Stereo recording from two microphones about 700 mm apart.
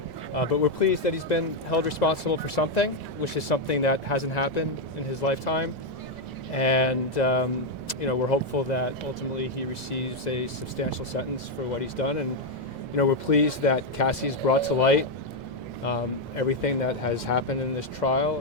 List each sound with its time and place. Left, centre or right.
0.3 s speech: left
11.7 s speech: left